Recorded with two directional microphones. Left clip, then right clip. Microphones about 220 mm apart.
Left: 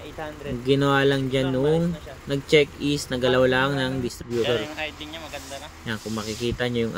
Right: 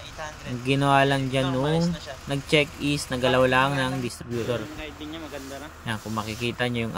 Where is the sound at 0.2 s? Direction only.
20° left (ahead or behind).